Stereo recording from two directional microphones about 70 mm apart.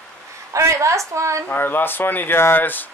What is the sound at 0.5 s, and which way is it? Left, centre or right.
Speech, right.